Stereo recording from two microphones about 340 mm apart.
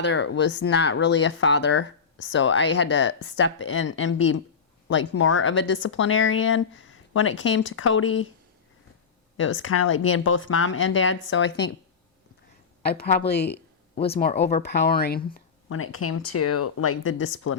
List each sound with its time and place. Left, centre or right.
0.0 s speech: left
9.4 s speech: left
12.8 s speech: left
15.7 s speech: left